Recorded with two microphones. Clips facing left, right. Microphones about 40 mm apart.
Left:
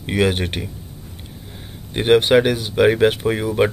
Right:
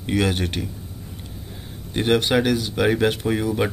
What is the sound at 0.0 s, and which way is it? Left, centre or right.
Speech, centre.